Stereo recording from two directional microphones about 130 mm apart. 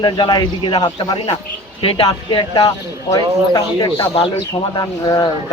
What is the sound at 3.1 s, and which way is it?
Speech, 25° left (ahead or behind).